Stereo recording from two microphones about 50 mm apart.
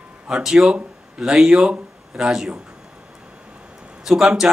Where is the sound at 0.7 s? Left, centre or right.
Centre.